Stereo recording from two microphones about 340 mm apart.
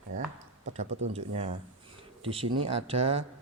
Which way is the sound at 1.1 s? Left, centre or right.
Centre.